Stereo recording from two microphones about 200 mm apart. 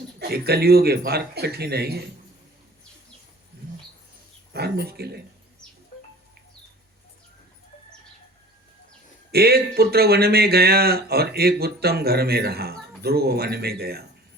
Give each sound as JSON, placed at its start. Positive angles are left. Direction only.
{"t": 0.2, "sound": "speech", "side_deg": -50}
{"t": 4.5, "sound": "speech", "side_deg": -55}
{"t": 9.3, "sound": "speech", "side_deg": -50}